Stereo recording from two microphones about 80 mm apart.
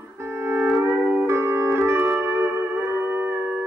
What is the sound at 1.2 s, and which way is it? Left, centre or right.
Music, right.